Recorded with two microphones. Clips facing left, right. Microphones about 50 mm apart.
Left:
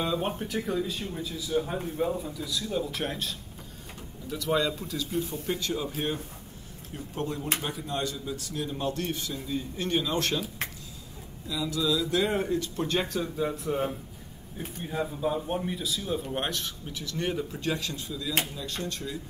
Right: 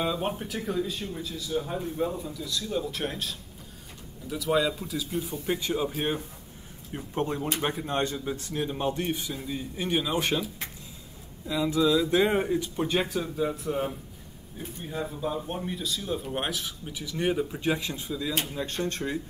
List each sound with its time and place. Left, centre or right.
0.0 s speech: centre
5.5 s a man's voice: centre
11.4 s speech: right; by 13.9 s centre
15.0 s speech: centre; by 18.3 s right
18.4 s speech: right